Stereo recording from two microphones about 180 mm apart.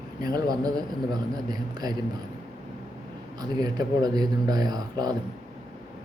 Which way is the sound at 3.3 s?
20° right (ahead or behind).